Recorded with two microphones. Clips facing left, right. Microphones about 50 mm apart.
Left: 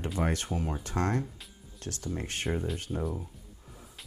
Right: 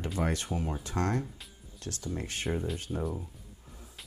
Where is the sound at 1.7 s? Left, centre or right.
Left.